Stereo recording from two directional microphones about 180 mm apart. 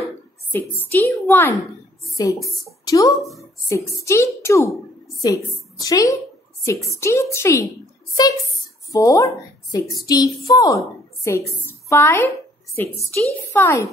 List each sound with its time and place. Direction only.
0.5 s a woman's voice: 10° left (ahead or behind)